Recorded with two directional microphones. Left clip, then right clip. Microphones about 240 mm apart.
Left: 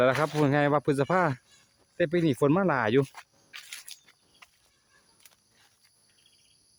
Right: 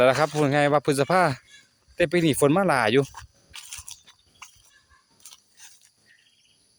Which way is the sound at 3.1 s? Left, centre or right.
Right.